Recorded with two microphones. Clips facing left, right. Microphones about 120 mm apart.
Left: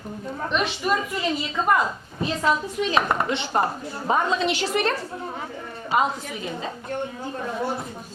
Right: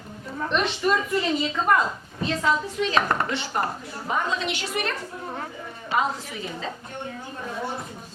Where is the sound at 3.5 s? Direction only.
30° left (ahead or behind).